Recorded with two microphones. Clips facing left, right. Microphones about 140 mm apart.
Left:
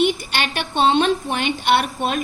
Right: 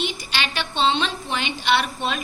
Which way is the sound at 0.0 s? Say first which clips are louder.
Left 7 dB; 55° left (ahead or behind).